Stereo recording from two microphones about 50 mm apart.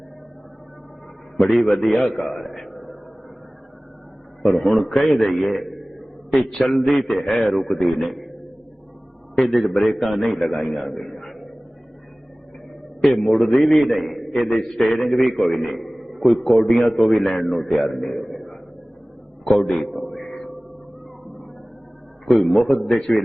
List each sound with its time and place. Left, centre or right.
1.5 s a man's voice: centre
4.4 s a man's voice: centre
10.8 s a sound: centre
13.0 s a man's voice: centre
19.5 s a sound: centre
22.4 s a man's voice: centre